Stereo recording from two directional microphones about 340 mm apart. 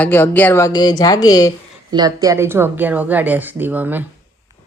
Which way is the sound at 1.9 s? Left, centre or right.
Centre.